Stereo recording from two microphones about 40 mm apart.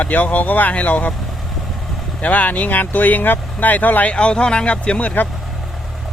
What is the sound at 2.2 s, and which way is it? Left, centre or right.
Speech, left.